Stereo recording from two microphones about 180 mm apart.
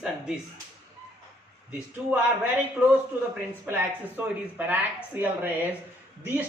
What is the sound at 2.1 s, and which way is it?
A woman's voice, 10° right (ahead or behind).